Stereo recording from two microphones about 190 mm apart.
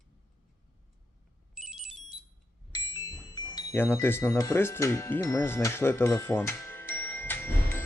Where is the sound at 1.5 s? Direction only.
5° right (ahead or behind).